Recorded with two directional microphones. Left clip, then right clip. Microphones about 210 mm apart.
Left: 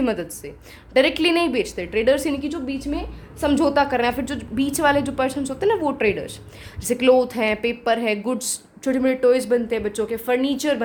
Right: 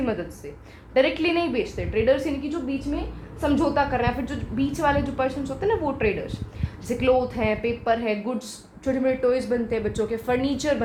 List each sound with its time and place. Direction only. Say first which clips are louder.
0.0 s a woman's voice: left 4 dB; 55° left (ahead or behind); by 10.8 s 30° left (ahead or behind)